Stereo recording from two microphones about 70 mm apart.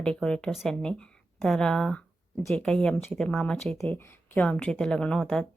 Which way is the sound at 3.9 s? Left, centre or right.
Left.